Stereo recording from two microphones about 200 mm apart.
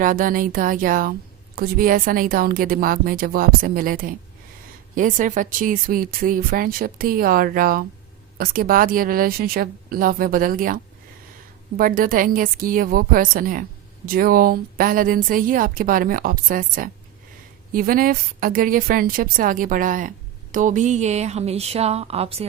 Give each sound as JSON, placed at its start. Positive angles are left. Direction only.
{"t": 0.0, "sound": "speech", "side_deg": -45}
{"t": 11.8, "sound": "a woman's voice", "side_deg": -45}